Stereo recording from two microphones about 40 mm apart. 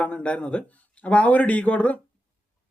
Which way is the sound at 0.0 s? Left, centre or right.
Left.